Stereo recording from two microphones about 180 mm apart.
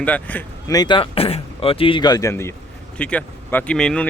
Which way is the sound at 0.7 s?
25° left (ahead or behind).